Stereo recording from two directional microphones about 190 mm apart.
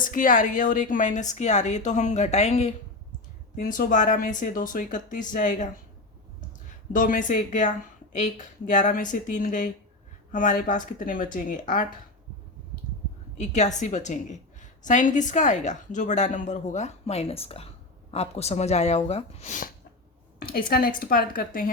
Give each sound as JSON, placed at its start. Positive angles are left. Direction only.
{"t": 0.0, "sound": "a woman's voice", "side_deg": 45}
{"t": 6.9, "sound": "speech", "side_deg": 45}
{"t": 13.3, "sound": "a woman's voice", "side_deg": 35}
{"t": 20.4, "sound": "speech", "side_deg": 50}